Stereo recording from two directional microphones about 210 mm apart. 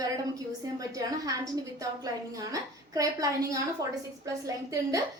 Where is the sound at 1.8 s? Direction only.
15° right (ahead or behind).